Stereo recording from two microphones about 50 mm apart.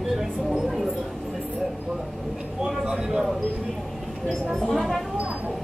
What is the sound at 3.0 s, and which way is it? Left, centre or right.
Speech, centre.